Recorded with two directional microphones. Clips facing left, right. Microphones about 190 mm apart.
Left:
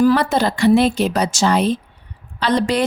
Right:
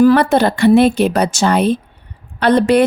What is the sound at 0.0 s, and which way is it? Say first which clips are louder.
A woman's voice: right 5 dB; 60° right (ahead or behind).